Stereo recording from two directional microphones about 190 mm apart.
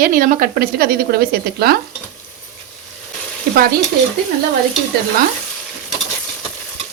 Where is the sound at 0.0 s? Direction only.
45° right (ahead or behind).